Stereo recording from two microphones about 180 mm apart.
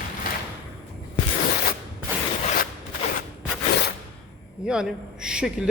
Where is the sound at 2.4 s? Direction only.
50° left (ahead or behind).